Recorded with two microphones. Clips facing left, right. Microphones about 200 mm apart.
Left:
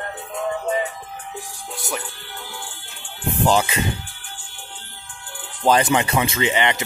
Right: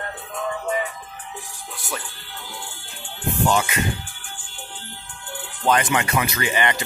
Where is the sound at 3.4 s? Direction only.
30° left (ahead or behind).